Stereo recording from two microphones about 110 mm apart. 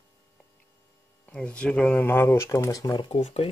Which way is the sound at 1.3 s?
10° left (ahead or behind).